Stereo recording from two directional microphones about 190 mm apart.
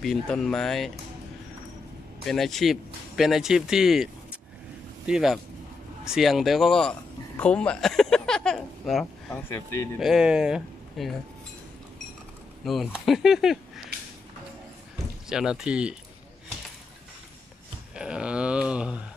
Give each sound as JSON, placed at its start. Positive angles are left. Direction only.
{"t": 0.0, "sound": "speech", "side_deg": 0}
{"t": 2.2, "sound": "a man's voice", "side_deg": 0}
{"t": 9.5, "sound": "speech", "side_deg": 15}
{"t": 9.9, "sound": "speech", "side_deg": 0}
{"t": 12.6, "sound": "speech", "side_deg": 0}
{"t": 15.2, "sound": "speech", "side_deg": -5}
{"t": 17.9, "sound": "a sound", "side_deg": -5}